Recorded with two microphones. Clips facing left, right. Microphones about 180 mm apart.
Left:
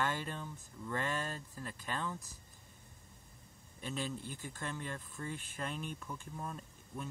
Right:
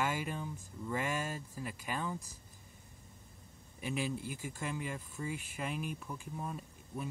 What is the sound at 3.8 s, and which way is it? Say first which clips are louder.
Speech: right 3 dB; 10° right (ahead or behind).